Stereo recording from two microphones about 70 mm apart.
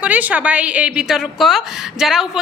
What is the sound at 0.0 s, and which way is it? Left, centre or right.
A woman's voice, right.